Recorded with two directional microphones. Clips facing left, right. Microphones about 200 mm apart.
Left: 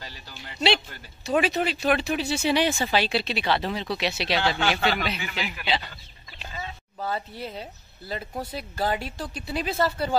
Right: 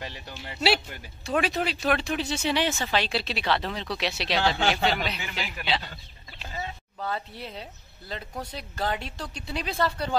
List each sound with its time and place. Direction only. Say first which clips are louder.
0.0 s music: right 5 dB; 20° right (ahead or behind)
1.2 s speech: left 3 dB; centre (ahead or behind)
7.0 s speech: left 2 dB; 5° left (ahead or behind)